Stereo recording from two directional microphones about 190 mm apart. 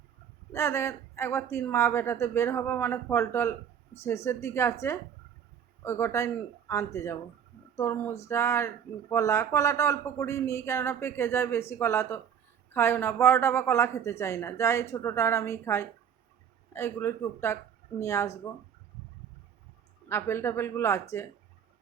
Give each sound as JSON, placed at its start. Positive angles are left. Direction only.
{"t": 0.5, "sound": "speech", "side_deg": 15}
{"t": 20.1, "sound": "speech", "side_deg": 15}